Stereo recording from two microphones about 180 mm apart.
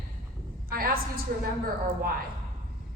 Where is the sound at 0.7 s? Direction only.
55° right (ahead or behind).